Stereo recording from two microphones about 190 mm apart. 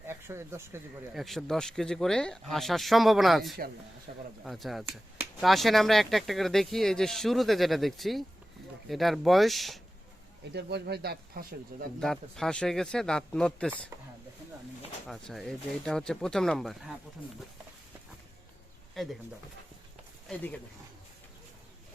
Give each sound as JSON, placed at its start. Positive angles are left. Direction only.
{"t": 0.1, "sound": "speech", "side_deg": -15}
{"t": 1.1, "sound": "speech", "side_deg": 0}
{"t": 4.1, "sound": "speech", "side_deg": -50}
{"t": 4.4, "sound": "speech", "side_deg": 0}
{"t": 10.5, "sound": "speech", "side_deg": -60}
{"t": 11.9, "sound": "speech", "side_deg": 0}
{"t": 15.0, "sound": "speech", "side_deg": 0}
{"t": 19.0, "sound": "speech", "side_deg": 0}
{"t": 20.2, "sound": "speech", "side_deg": 5}